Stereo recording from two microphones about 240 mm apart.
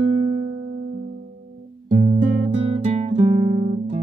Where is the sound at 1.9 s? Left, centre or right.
Right.